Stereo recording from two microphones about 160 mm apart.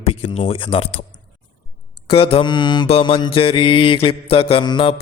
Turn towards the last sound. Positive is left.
turn(degrees=30)  # may be behind; listen again after turning